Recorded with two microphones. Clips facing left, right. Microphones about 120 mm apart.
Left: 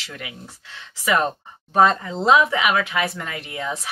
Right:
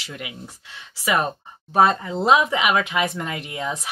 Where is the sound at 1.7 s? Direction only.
15° right (ahead or behind).